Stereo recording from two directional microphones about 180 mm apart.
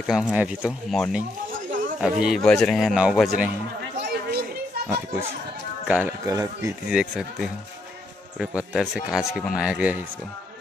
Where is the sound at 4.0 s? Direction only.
65° right (ahead or behind).